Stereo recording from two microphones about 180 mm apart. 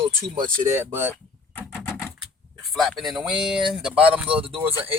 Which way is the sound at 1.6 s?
10° left (ahead or behind).